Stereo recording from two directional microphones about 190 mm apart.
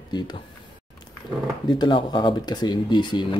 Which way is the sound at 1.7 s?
25° left (ahead or behind).